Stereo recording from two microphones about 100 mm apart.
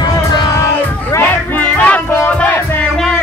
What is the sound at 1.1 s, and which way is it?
Music, 20° left (ahead or behind).